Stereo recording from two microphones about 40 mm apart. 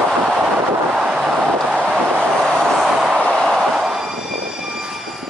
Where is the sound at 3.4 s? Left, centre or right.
Centre.